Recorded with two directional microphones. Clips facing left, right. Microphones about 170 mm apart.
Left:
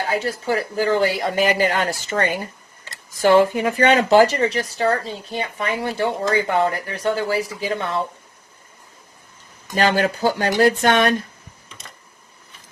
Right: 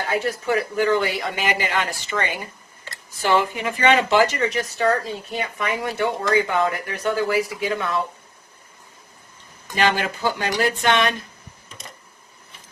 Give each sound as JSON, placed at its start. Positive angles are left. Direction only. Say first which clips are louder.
{"t": 0.1, "sound": "speech", "louder": "right 2 dB", "side_deg": 30}
{"t": 9.7, "sound": "speech", "louder": "left 3 dB", "side_deg": 45}